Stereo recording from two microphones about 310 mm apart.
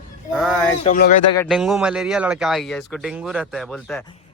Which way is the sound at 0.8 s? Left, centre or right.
Left.